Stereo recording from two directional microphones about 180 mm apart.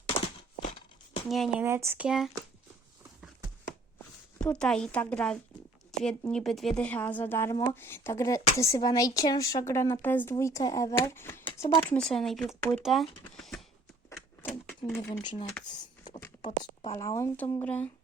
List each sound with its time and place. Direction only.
1.3 s speech: centre (ahead or behind)
1.6 s speech: 15° right (ahead or behind)
4.4 s speech: 5° left (ahead or behind)
13.3 s beatboxing: 5° left (ahead or behind)
14.4 s a sound: 10° left (ahead or behind)
14.8 s speech: 15° left (ahead or behind)
16.4 s a woman's voice: 40° left (ahead or behind)
17.0 s speech: 15° left (ahead or behind)